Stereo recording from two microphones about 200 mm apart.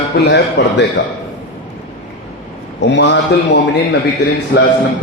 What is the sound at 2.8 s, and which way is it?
A man's voice, 60° left (ahead or behind).